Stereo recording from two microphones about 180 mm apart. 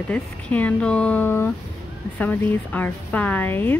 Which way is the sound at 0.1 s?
10° left (ahead or behind).